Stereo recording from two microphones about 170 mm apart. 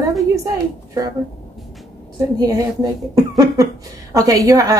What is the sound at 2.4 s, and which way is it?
A woman's voice, 20° right (ahead or behind).